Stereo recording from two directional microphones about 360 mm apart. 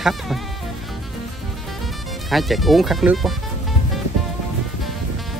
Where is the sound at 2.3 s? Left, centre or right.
Centre.